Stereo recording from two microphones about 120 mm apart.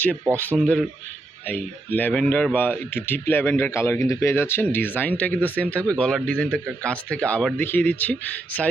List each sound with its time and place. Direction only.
0.5 s speech: 5° right (ahead or behind)
1.5 s speech: 15° left (ahead or behind)